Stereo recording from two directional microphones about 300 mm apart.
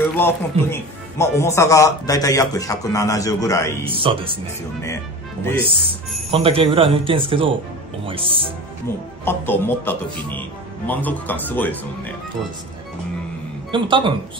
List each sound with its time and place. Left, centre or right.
0.2 s a man's voice: centre
3.9 s speech: centre
5.7 s speech: centre
9.2 s a man's voice: centre
13.7 s speech: centre